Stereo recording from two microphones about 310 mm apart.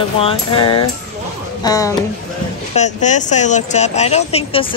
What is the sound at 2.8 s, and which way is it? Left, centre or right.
Speech, left.